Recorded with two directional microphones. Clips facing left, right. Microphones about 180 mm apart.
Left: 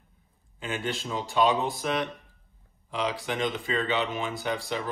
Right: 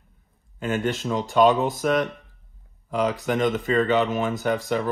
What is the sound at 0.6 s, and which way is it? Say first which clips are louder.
Speech: right 7 dB; 45° right (ahead or behind).